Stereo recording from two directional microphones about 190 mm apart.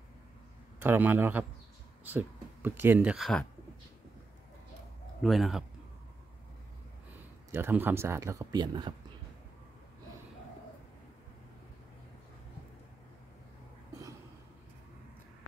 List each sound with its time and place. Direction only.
0.7 s speech: 10° right (ahead or behind)
5.2 s speech: centre (ahead or behind)
7.5 s speech: 10° right (ahead or behind)